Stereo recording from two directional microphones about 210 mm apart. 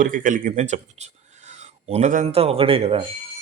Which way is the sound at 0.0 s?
40° right (ahead or behind).